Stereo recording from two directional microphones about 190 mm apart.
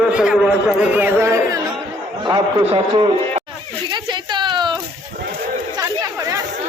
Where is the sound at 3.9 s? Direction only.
25° right (ahead or behind).